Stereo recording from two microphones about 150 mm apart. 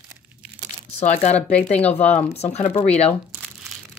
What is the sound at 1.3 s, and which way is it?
Speech, 10° left (ahead or behind).